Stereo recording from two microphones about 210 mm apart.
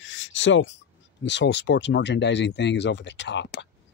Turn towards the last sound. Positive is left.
turn(degrees=55)  # may be behind; listen again after turning